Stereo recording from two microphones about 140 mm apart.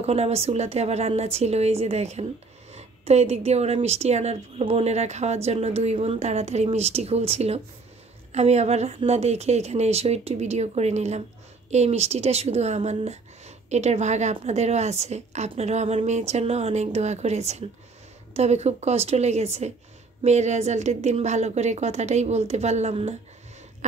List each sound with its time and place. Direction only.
0.0 s a woman's voice: 50° right (ahead or behind)